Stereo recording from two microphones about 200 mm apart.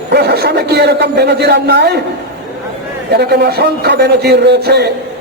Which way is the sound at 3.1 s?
55° right (ahead or behind).